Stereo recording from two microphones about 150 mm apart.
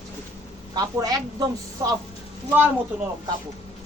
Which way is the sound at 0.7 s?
25° right (ahead or behind).